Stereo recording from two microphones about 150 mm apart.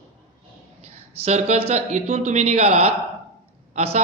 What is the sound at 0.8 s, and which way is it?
A woman's voice, 45° right (ahead or behind).